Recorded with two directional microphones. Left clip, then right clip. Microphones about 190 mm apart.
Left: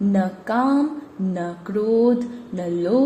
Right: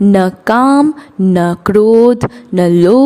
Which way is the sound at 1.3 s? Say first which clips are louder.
Right 15 dB; 55° right (ahead or behind).